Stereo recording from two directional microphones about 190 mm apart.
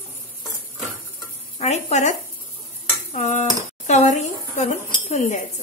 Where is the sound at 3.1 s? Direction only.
35° left (ahead or behind).